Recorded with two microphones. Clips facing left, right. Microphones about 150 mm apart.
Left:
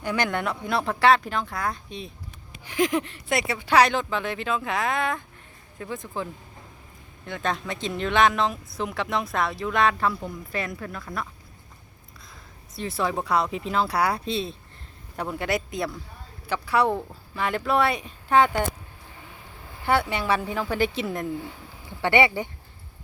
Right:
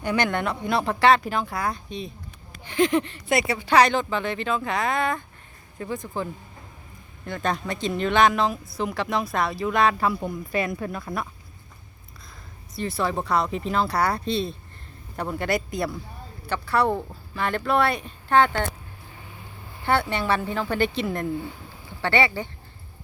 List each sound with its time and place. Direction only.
0.0 s speech: 5° left (ahead or behind)
7.3 s speech: centre (ahead or behind)
10.1 s speech: 15° right (ahead or behind)
12.7 s speech: centre (ahead or behind)
19.8 s speech: 5° left (ahead or behind)
22.0 s speech: 20° left (ahead or behind)